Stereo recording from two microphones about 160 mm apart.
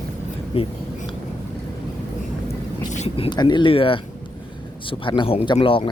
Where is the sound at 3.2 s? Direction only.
25° left (ahead or behind).